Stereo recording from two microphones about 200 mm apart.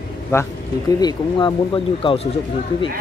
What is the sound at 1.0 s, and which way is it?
Speech, 20° left (ahead or behind).